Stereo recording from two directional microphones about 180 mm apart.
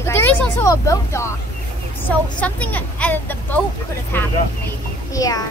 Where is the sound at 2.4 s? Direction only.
10° left (ahead or behind).